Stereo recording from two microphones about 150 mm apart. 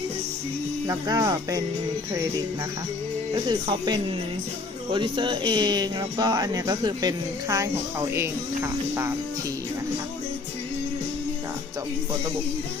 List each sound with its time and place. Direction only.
0.9 s speech: 25° right (ahead or behind)
3.3 s speech: 30° right (ahead or behind)